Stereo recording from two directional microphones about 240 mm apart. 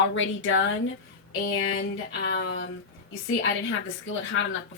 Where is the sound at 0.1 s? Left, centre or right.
Left.